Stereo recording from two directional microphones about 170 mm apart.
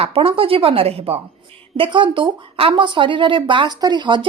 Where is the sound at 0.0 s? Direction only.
35° right (ahead or behind).